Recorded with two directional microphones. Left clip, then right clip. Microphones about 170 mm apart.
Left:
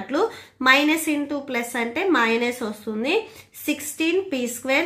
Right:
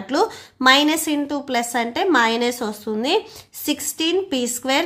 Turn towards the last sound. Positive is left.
turn(degrees=-45)  # may be behind; listen again after turning